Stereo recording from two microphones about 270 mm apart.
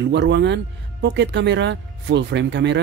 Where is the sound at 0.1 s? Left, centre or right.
Right.